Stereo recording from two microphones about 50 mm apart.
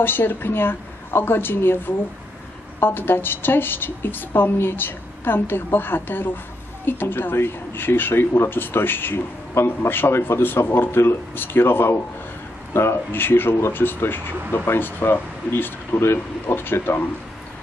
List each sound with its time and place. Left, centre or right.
0.0 s speech: left
2.8 s speech: left